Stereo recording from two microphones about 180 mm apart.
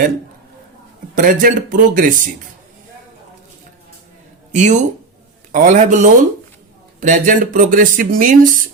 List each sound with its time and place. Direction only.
1.1 s speech: 50° right (ahead or behind)
4.5 s speech: 40° right (ahead or behind)